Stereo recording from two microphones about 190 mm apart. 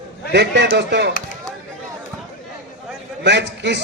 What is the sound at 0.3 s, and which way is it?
Speech, 65° right (ahead or behind).